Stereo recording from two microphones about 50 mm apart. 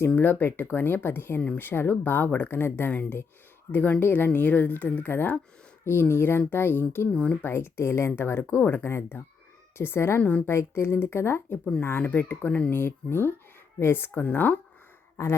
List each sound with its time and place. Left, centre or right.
0.2 s speech: left
2.9 s speech: left
5.8 s speech: left
7.1 s speech: left
7.4 s speech: left
10.2 s speech: left
10.4 s speech: left
11.8 s speech: left
14.1 s speech: left